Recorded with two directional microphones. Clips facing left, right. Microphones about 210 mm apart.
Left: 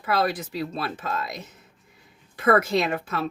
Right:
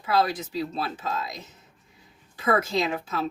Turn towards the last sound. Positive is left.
turn(degrees=60)  # may be behind; listen again after turning